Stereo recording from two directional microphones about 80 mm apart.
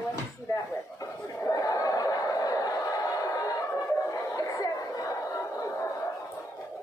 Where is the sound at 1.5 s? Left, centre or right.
Left.